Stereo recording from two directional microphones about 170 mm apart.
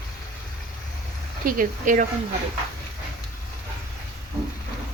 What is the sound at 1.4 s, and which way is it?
Speech, 50° right (ahead or behind).